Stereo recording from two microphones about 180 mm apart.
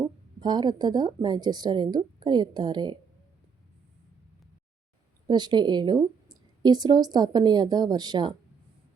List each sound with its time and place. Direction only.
0.3 s speech: 25° right (ahead or behind)
5.3 s speech: 25° right (ahead or behind)